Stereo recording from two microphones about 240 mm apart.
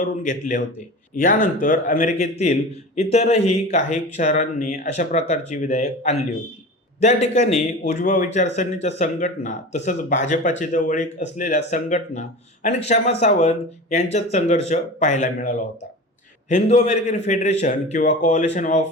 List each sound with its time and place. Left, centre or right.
0.0 s speech: left